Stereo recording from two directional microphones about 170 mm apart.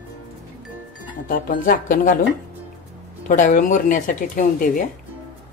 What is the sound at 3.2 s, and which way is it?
Speech, 45° left (ahead or behind).